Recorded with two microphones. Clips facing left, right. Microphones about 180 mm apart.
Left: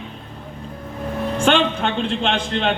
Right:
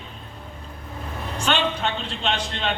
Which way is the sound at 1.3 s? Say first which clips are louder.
Left 6 dB; 50° left (ahead or behind).